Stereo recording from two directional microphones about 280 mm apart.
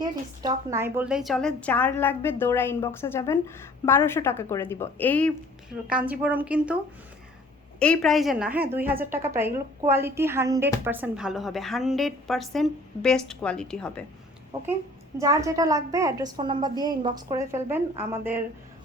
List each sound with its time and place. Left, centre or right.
0.0 s a woman's voice: centre
5.9 s speech: centre
7.8 s a woman's voice: centre
15.2 s a woman's voice: centre